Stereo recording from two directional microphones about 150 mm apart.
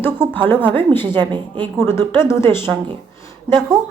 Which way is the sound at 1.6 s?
15° left (ahead or behind).